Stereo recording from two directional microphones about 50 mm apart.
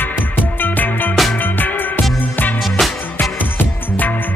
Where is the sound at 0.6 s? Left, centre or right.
Left.